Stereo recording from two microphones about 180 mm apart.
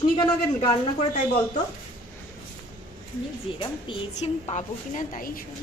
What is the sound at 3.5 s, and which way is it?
A woman's voice, 30° left (ahead or behind).